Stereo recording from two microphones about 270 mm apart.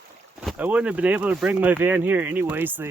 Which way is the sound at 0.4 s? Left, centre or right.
Centre.